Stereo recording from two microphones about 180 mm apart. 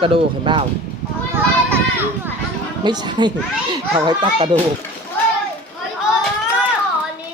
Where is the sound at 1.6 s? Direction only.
10° right (ahead or behind).